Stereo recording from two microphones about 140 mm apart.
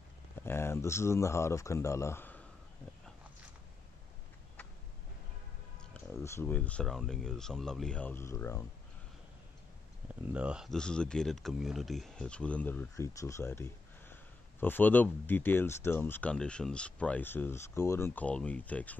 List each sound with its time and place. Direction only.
0.4 s speech: 15° left (ahead or behind)
6.2 s speech: 15° left (ahead or behind)
10.3 s speech: 5° right (ahead or behind)
10.7 s speech: 5° left (ahead or behind)